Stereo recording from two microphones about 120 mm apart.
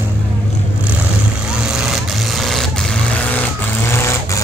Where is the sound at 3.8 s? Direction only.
20° left (ahead or behind).